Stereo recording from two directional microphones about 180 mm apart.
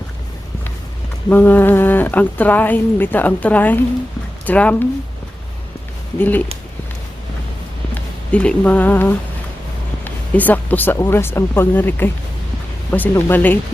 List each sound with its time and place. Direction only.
1.3 s speech: 10° left (ahead or behind)
6.1 s speech: 10° left (ahead or behind)
7.9 s speech: 5° left (ahead or behind)